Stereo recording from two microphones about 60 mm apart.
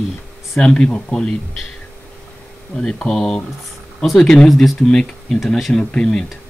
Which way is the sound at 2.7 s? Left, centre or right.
Centre.